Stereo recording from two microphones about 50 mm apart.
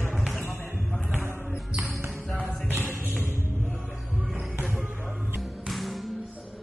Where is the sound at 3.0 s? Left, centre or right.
Left.